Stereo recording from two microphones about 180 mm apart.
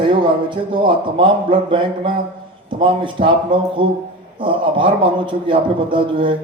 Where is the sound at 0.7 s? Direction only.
30° right (ahead or behind).